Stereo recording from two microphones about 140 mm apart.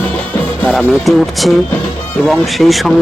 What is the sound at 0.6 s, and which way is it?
A man's voice, 5° left (ahead or behind).